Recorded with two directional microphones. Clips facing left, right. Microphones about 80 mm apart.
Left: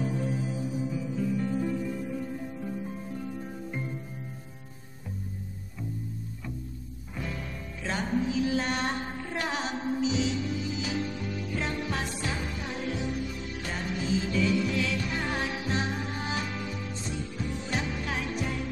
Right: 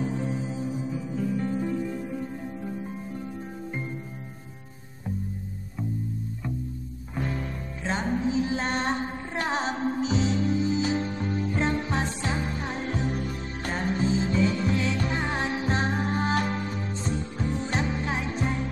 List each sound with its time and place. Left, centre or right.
7.2 s music: right